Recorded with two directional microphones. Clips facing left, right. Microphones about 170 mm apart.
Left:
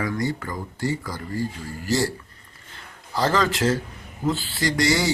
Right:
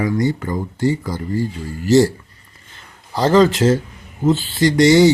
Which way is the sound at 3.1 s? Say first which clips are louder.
Right 9 dB; 25° right (ahead or behind).